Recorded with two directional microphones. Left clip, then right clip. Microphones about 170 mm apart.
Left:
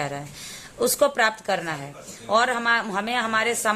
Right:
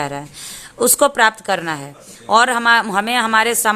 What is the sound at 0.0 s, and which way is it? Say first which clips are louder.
A woman's voice: right 6 dB; 30° right (ahead or behind).